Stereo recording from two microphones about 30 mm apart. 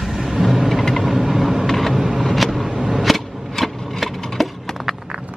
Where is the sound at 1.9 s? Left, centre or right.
Centre.